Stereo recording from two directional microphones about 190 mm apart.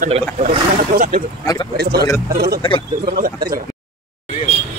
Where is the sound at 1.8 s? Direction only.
55° right (ahead or behind).